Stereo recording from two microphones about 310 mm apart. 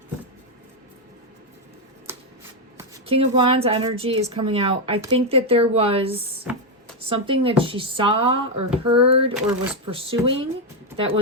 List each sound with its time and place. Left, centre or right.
2.1 s shuffling cards: centre
2.7 s a woman's voice: centre
9.3 s speech: centre
9.8 s a woman's voice: centre